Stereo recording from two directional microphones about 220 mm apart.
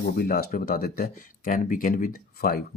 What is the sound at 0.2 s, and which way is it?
Speech, 45° left (ahead or behind).